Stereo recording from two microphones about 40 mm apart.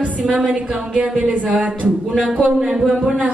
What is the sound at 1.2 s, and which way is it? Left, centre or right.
A woman's voice, right.